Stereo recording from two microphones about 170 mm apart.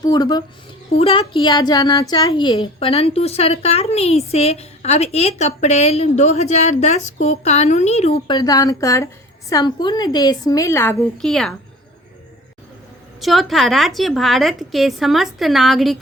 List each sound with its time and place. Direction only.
0.0 s a woman's voice: 25° left (ahead or behind)
0.9 s a woman's voice: 35° left (ahead or behind); by 10.9 s 15° left (ahead or behind)
11.2 s a woman's voice: 5° left (ahead or behind)
13.2 s a woman's voice: centre (ahead or behind)